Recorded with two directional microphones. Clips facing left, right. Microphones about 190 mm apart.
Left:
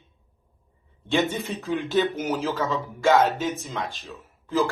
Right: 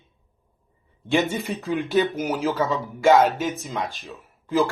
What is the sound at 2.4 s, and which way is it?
Speech, 15° right (ahead or behind).